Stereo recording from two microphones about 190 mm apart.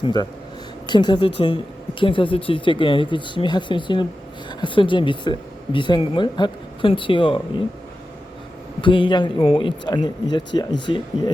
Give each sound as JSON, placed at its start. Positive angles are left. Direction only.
{"t": 0.0, "sound": "speech", "side_deg": 20}
{"t": 8.8, "sound": "speech", "side_deg": 25}